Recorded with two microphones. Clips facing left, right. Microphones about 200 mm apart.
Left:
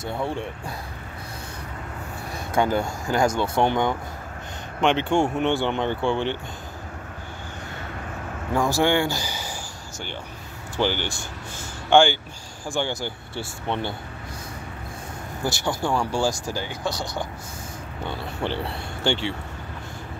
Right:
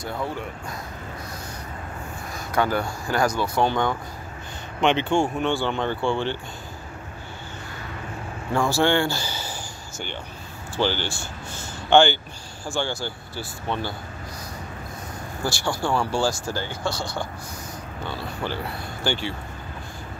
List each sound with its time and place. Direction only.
0.0 s speech: 25° left (ahead or behind)
2.3 s speech: 20° left (ahead or behind)
5.1 s speech: 20° left (ahead or behind)
8.5 s speech: 15° left (ahead or behind)
10.8 s speech: 15° left (ahead or behind)
15.4 s speech: 20° left (ahead or behind)
18.4 s speech: 25° left (ahead or behind)